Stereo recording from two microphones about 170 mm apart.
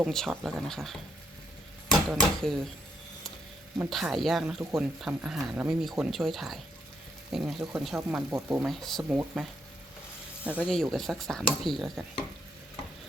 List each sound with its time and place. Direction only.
0.0 s speech: centre (ahead or behind)
3.8 s speech: centre (ahead or behind)
8.3 s speech: 15° right (ahead or behind)
8.6 s speech: centre (ahead or behind)